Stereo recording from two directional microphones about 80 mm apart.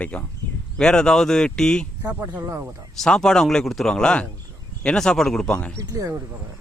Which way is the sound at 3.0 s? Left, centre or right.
Centre.